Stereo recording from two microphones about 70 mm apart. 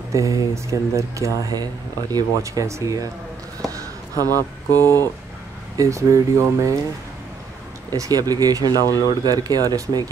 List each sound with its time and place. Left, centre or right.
0.1 s speech: right
1.6 s speech: right
3.6 s a sound: right
4.4 s speech: left
5.8 s speech: right
7.9 s speech: right